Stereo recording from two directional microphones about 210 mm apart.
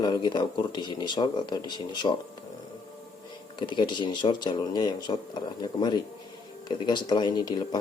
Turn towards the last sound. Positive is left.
turn(degrees=20)  # may be behind; listen again after turning